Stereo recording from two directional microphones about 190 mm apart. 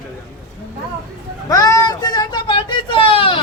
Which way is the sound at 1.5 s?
20° left (ahead or behind).